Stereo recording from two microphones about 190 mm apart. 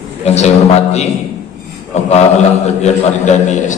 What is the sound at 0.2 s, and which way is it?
Speech, 35° left (ahead or behind).